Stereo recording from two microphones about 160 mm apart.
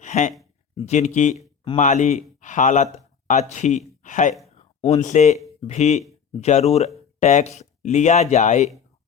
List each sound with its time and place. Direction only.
0.0 s speech: 50° left (ahead or behind)
4.4 s a sound: 45° left (ahead or behind)
5.0 s speech: 50° left (ahead or behind)